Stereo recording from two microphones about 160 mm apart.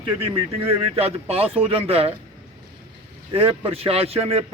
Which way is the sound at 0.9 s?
40° right (ahead or behind).